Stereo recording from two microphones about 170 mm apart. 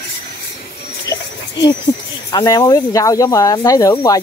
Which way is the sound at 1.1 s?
20° left (ahead or behind).